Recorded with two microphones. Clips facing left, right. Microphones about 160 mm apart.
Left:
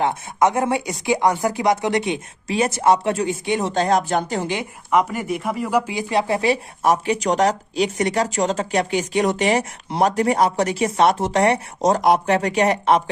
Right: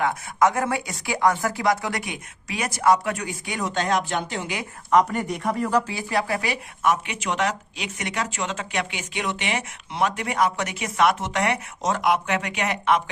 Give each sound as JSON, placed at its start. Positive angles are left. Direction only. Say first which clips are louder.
{"t": 0.0, "sound": "speech", "louder": "left 2 dB", "side_deg": 25}
{"t": 4.9, "sound": "speech", "louder": "even", "side_deg": 5}
{"t": 5.9, "sound": "speech", "louder": "left 5 dB", "side_deg": 20}